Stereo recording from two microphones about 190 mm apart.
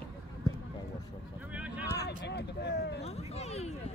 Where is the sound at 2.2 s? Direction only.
60° left (ahead or behind).